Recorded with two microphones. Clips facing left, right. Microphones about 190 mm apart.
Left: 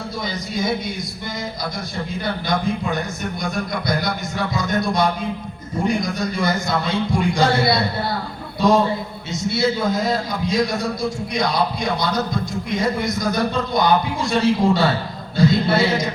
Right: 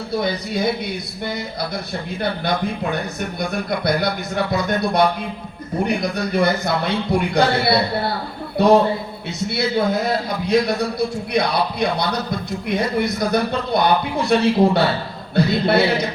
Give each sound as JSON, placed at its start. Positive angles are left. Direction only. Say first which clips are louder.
{"t": 0.2, "sound": "a man's voice", "louder": "right 3 dB", "side_deg": -60}
{"t": 2.5, "sound": "a man's voice", "louder": "left 3 dB", "side_deg": -60}